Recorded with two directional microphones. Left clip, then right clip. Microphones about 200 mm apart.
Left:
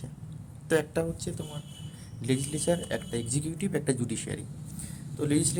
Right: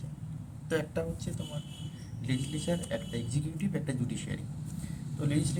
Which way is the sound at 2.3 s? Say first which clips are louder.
Left 6 dB; 55° left (ahead or behind).